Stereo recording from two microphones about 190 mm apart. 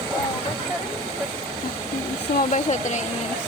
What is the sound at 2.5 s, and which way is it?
Speech, 40° left (ahead or behind).